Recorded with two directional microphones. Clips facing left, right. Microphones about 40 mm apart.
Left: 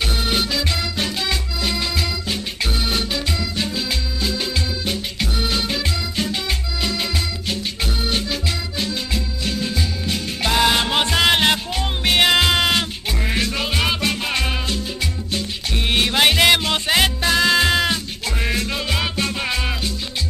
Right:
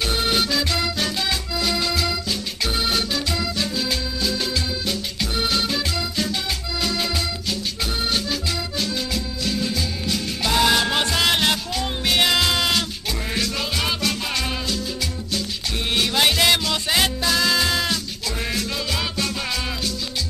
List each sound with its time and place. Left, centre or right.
0.9 s music: left
10.7 s music: left